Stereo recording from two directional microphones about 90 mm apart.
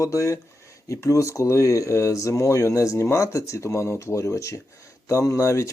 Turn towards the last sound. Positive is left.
turn(degrees=35)  # may be behind; listen again after turning